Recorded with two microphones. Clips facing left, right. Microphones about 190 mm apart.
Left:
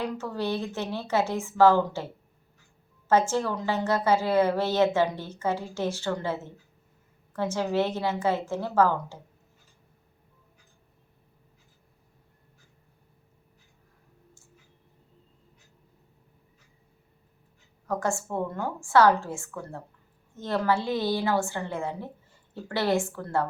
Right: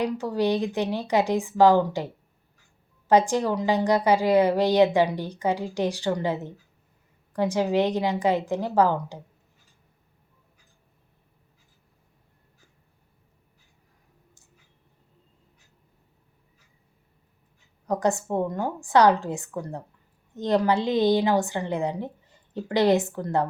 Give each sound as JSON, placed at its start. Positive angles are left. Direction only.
{"t": 0.0, "sound": "a woman's voice", "side_deg": -15}
{"t": 3.1, "sound": "a woman's voice", "side_deg": -15}
{"t": 17.8, "sound": "a woman's voice", "side_deg": -20}